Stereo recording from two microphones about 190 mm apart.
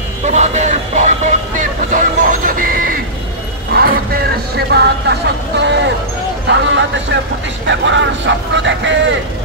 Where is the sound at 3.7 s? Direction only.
55° right (ahead or behind).